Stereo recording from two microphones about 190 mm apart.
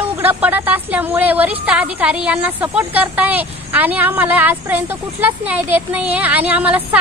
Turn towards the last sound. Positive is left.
turn(degrees=-5)  # may be behind; listen again after turning